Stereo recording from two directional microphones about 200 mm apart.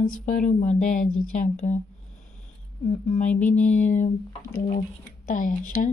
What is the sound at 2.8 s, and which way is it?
Speech, 35° left (ahead or behind).